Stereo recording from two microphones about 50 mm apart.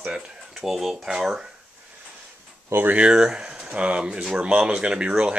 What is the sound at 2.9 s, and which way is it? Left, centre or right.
Speech, centre.